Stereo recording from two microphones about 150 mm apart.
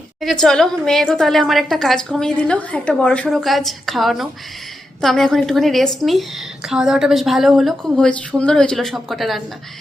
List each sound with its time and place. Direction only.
0.2 s a woman's voice: centre (ahead or behind)